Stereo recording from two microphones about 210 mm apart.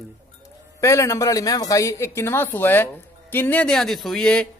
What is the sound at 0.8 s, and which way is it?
Speech, 15° left (ahead or behind).